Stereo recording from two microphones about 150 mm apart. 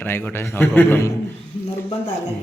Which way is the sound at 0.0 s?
15° left (ahead or behind).